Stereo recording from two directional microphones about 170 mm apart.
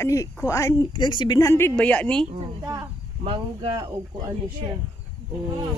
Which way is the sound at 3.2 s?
30° right (ahead or behind).